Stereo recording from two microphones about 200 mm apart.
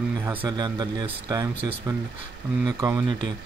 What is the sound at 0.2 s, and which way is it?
Speech, 10° right (ahead or behind).